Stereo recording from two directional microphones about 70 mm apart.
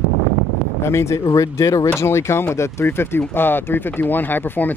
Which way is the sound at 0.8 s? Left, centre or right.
Left.